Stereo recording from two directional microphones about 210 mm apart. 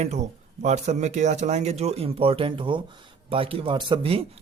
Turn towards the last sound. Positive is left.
turn(degrees=-25)  # may be behind; listen again after turning